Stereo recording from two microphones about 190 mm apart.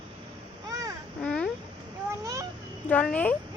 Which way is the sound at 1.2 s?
5° left (ahead or behind).